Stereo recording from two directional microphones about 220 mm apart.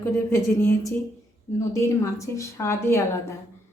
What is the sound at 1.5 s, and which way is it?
A woman's voice, 15° left (ahead or behind).